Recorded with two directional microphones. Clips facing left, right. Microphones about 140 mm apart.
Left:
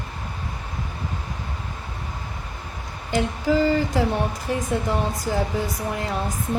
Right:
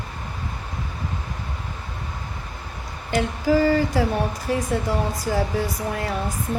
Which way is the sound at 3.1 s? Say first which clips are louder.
Right 1 dB; 20° left (ahead or behind).